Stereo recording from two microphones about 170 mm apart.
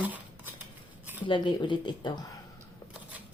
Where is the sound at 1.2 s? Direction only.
30° left (ahead or behind).